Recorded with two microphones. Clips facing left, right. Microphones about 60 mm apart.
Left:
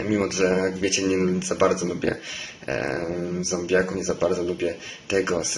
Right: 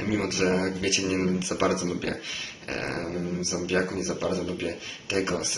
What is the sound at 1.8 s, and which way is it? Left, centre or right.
A man's voice, left.